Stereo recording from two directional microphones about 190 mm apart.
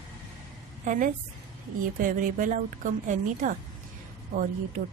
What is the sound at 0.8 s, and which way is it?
A woman's voice, 45° right (ahead or behind).